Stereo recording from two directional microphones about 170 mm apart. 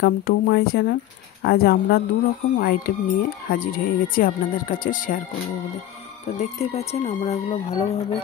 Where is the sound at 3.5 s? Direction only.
55° left (ahead or behind).